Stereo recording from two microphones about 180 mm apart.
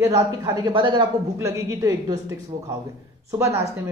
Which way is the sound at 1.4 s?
15° right (ahead or behind).